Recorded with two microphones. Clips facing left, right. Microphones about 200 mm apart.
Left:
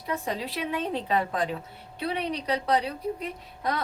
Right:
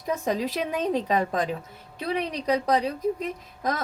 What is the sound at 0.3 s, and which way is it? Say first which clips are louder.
A woman's voice: right 7 dB; 45° right (ahead or behind).